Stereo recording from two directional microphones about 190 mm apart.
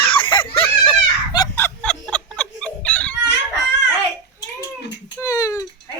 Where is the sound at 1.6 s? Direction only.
10° left (ahead or behind).